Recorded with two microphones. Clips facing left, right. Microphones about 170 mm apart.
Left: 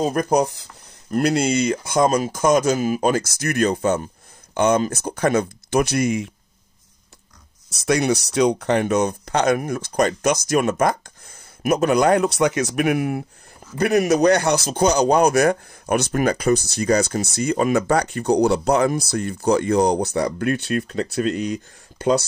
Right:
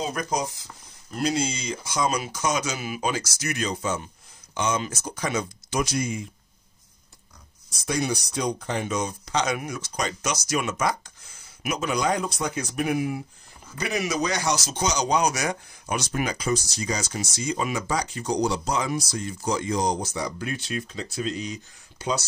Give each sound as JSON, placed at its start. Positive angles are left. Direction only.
{"t": 0.0, "sound": "speech", "side_deg": 50}
{"t": 7.8, "sound": "speech", "side_deg": 75}